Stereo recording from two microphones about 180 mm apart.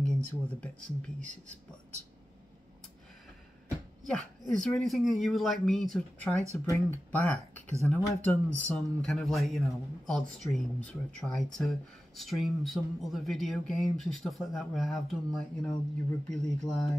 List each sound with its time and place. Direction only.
0.0 s speech: 5° left (ahead or behind)
4.0 s speech: 5° left (ahead or behind)
6.5 s speech: 15° left (ahead or behind)